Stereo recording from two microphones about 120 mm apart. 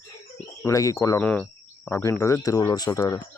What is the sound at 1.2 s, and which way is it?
Speech, 10° left (ahead or behind).